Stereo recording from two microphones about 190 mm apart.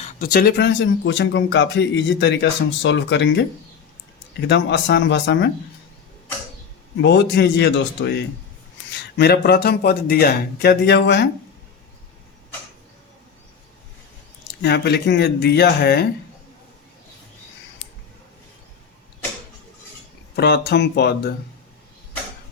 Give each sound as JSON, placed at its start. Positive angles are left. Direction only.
{"t": 0.0, "sound": "speech", "side_deg": 50}
{"t": 7.0, "sound": "speech", "side_deg": 65}
{"t": 14.6, "sound": "speech", "side_deg": 60}
{"t": 20.3, "sound": "speech", "side_deg": 60}